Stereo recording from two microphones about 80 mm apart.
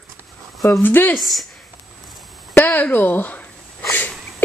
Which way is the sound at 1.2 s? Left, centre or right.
Centre.